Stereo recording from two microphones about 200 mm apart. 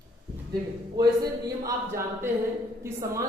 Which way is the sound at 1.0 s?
15° right (ahead or behind).